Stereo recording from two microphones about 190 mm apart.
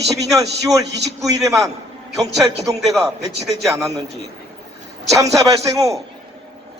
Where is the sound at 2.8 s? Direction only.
Centre (ahead or behind).